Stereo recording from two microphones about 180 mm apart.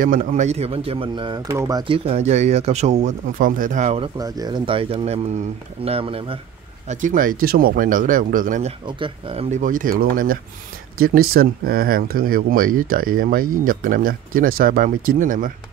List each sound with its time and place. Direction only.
0.0 s speech: 45° right (ahead or behind); by 2.0 s 20° right (ahead or behind)
2.0 s speech: 40° right (ahead or behind)
4.2 s speech: 20° right (ahead or behind)
6.9 s speech: 45° right (ahead or behind)
8.8 s speech: 30° right (ahead or behind)
9.6 s speech: 50° right (ahead or behind)